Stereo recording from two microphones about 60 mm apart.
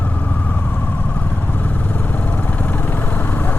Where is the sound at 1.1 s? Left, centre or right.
Left.